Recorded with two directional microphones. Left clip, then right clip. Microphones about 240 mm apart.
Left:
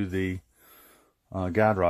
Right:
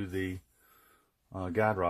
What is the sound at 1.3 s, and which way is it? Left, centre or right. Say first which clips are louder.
Speech: left 6 dB; left.